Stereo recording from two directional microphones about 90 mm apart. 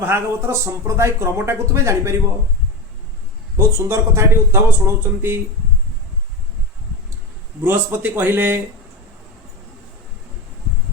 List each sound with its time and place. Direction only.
0.0 s speech: 30° right (ahead or behind)
3.7 s speech: 30° right (ahead or behind)
7.6 s speech: 25° right (ahead or behind)